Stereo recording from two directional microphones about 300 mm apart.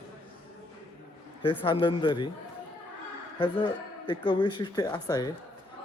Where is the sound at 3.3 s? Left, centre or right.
Centre.